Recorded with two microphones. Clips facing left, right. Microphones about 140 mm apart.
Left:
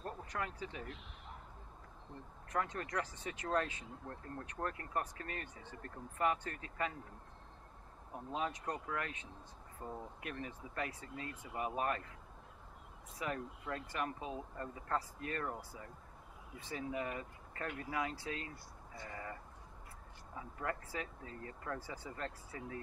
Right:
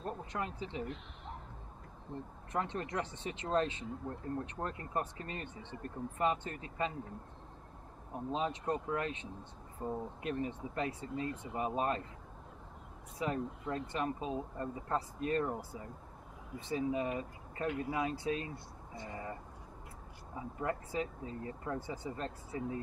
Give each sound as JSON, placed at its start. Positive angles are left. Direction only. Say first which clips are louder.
{"t": 0.0, "sound": "speech", "louder": "right 3 dB", "side_deg": -20}
{"t": 2.5, "sound": "speech", "louder": "right 2 dB", "side_deg": -25}
{"t": 8.1, "sound": "speech", "louder": "right 4 dB", "side_deg": -25}
{"t": 13.2, "sound": "speech", "louder": "right 5 dB", "side_deg": -25}
{"t": 16.6, "sound": "speech", "louder": "right 6 dB", "side_deg": -20}
{"t": 20.3, "sound": "speech", "louder": "right 4 dB", "side_deg": -20}